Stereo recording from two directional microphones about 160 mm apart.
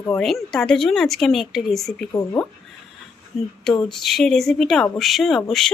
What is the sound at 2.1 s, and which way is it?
Speech, 20° left (ahead or behind).